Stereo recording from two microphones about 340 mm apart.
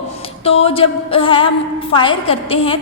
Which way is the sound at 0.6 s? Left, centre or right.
Centre.